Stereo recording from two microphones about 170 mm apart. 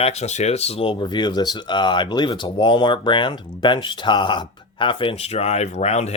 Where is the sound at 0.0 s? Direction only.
40° left (ahead or behind).